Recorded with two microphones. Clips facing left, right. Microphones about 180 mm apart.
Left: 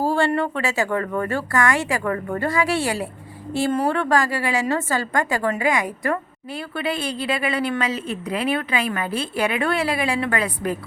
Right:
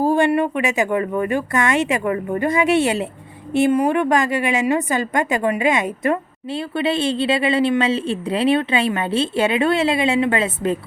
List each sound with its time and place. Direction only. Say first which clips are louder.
0.0 s a woman's voice: right 4 dB; 15° right (ahead or behind)